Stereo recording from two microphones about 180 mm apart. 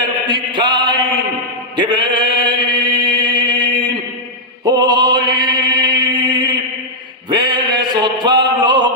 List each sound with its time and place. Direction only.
0.3 s chant: 25° right (ahead or behind)
4.6 s music: 25° right (ahead or behind)
6.1 s a sound: 25° right (ahead or behind)